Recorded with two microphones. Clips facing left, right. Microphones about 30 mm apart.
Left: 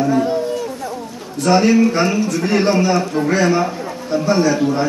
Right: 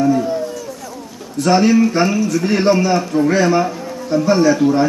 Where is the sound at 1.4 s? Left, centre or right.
Centre.